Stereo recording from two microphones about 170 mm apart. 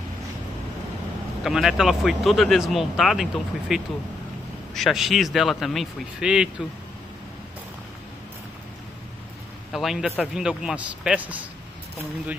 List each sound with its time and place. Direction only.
1.4 s speech: centre (ahead or behind)
9.7 s speech: centre (ahead or behind)